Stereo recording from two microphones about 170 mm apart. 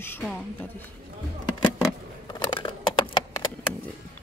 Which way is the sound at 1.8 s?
25° left (ahead or behind).